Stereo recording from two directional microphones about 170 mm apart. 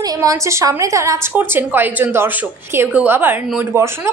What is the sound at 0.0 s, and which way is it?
A woman's voice, 20° right (ahead or behind).